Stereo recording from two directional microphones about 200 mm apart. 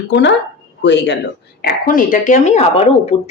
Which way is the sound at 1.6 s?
45° left (ahead or behind).